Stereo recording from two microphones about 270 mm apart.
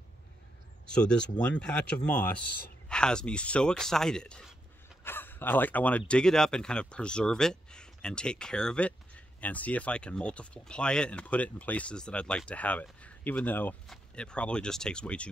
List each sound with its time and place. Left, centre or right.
0.8 s speech: centre